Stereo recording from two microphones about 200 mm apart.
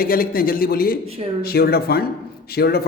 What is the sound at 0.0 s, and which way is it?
Speech, 45° left (ahead or behind).